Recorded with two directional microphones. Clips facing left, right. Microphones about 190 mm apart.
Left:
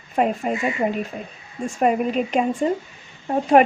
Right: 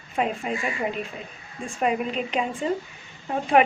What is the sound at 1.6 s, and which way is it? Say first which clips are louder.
A woman's voice: left 5 dB; 45° left (ahead or behind).